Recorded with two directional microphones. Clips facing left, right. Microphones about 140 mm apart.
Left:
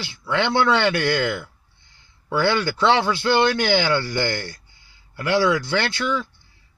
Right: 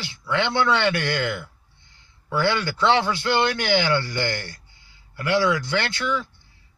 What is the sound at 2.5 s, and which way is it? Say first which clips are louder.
A man's voice: left 2 dB; 35° left (ahead or behind).